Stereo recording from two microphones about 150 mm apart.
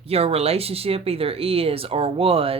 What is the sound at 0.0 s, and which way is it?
Speech, 40° right (ahead or behind).